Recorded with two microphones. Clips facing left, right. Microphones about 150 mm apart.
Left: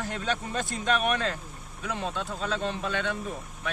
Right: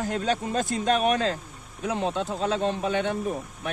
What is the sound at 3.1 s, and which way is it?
Speech, 50° right (ahead or behind).